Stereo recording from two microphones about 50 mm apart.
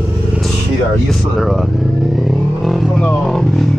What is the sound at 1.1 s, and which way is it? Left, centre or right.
Vehicle, centre.